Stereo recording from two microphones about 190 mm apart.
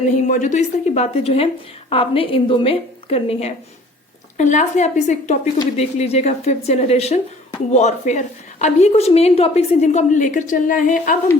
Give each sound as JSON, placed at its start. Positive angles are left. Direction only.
{"t": 0.2, "sound": "a woman's voice", "side_deg": 40}